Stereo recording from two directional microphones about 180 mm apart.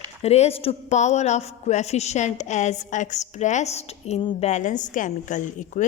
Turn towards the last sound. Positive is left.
turn(degrees=45)  # may be behind; listen again after turning